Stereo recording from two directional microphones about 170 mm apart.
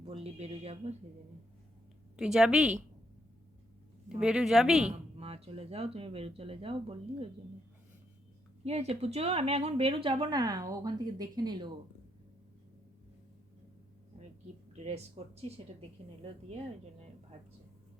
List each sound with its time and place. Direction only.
0.0 s speech: 35° right (ahead or behind)
2.1 s speech: 5° right (ahead or behind)
4.2 s speech: 5° right (ahead or behind)
4.9 s speech: 35° right (ahead or behind)
8.6 s speech: 40° right (ahead or behind)
14.8 s speech: 40° right (ahead or behind)